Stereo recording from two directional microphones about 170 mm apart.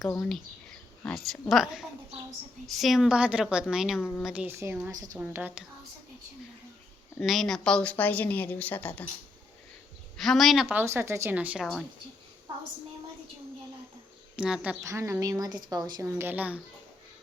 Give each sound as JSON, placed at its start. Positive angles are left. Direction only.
{"t": 1.0, "sound": "a woman's voice", "side_deg": 0}
{"t": 7.2, "sound": "a woman's voice", "side_deg": 0}
{"t": 10.2, "sound": "a woman's voice", "side_deg": 0}
{"t": 11.6, "sound": "a woman's voice", "side_deg": 0}
{"t": 14.3, "sound": "a woman's voice", "side_deg": -5}
{"t": 14.8, "sound": "a woman's voice", "side_deg": -20}